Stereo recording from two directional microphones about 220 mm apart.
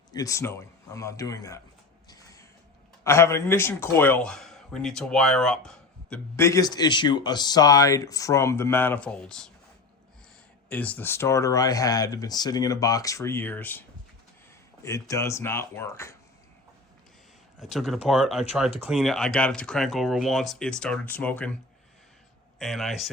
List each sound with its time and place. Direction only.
0.1 s speech: 15° left (ahead or behind)
2.0 s a sound: 15° left (ahead or behind)
3.0 s speech: 10° left (ahead or behind)
10.7 s speech: 5° left (ahead or behind)
14.8 s speech: 15° left (ahead or behind)
17.6 s speech: centre (ahead or behind)
22.5 s speech: centre (ahead or behind)